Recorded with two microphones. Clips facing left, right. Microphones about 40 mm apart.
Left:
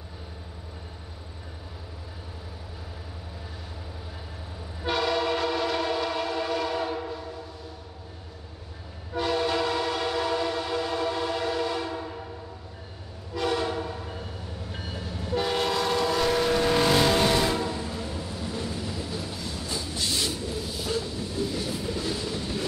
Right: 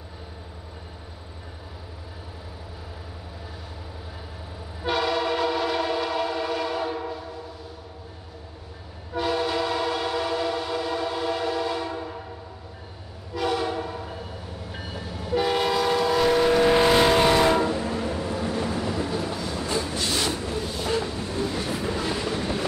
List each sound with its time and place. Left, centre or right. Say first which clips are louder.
4.8 s train: right 1 dB; centre
9.1 s train: right 1 dB; centre
13.3 s train: right 1 dB; centre
17.5 s train: right 6 dB; right